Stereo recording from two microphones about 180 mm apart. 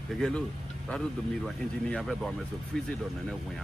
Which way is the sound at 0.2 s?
5° left (ahead or behind).